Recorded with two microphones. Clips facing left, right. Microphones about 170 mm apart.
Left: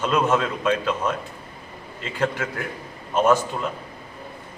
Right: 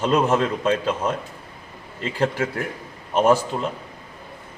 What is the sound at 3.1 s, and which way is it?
Speech, 30° right (ahead or behind).